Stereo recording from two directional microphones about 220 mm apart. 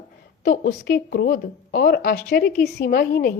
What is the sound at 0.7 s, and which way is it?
A woman's voice, 45° left (ahead or behind).